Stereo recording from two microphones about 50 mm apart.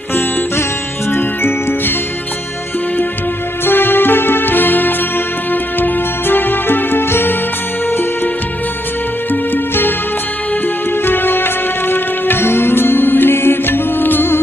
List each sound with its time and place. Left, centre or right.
0.1 s music: left
3.6 s music: left
9.3 s music: left
10.9 s music: left